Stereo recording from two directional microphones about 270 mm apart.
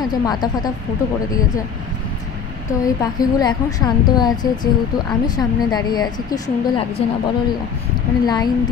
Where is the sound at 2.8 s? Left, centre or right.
Centre.